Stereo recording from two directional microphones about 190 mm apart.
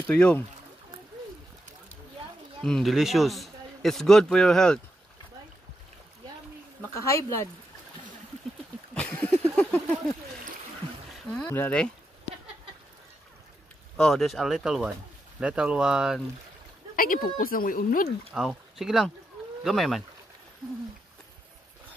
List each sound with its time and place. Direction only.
0.1 s speech: 5° left (ahead or behind)
2.6 s a man's voice: centre (ahead or behind)
6.8 s speech: 15° left (ahead or behind)
8.9 s a sound: 5° left (ahead or behind)
11.5 s speech: 10° left (ahead or behind)
13.9 s a man's voice: 5° left (ahead or behind)
16.9 s speech: 50° left (ahead or behind)
18.3 s a man's voice: centre (ahead or behind)